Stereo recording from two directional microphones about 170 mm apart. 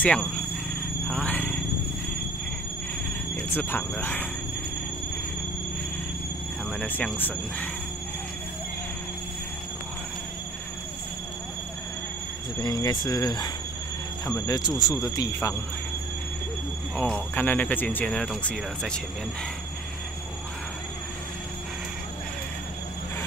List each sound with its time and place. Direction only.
0.0 s speech: 5° left (ahead or behind)
1.0 s a sound: 5° left (ahead or behind)
3.5 s speech: 10° left (ahead or behind)
6.8 s speech: 5° left (ahead or behind)
12.6 s speech: 25° left (ahead or behind)
16.9 s speech: 10° left (ahead or behind)